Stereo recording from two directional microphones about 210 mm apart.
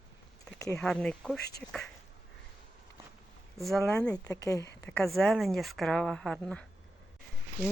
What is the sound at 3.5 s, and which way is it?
Speech, centre (ahead or behind).